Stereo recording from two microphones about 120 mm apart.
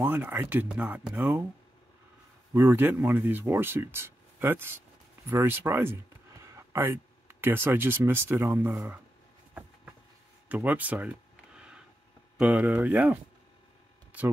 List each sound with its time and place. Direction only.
0.0 s speech: 20° right (ahead or behind)
2.5 s speech: 20° right (ahead or behind)
10.5 s a sound: 15° right (ahead or behind)
12.4 s speech: 10° right (ahead or behind)